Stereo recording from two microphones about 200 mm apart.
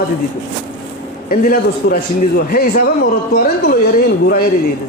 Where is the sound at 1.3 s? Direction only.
45° left (ahead or behind).